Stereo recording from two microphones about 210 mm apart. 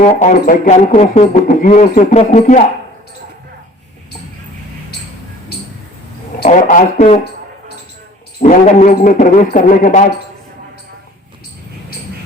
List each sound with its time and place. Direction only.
0.0 s speech: 35° left (ahead or behind)
6.4 s speech: 35° left (ahead or behind)
8.4 s speech: 35° left (ahead or behind)